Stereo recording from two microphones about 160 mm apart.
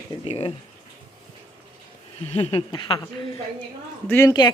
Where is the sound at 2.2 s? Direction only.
40° left (ahead or behind).